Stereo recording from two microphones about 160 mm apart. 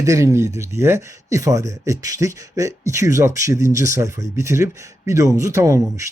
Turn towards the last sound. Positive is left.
turn(degrees=-20)  # may be behind; listen again after turning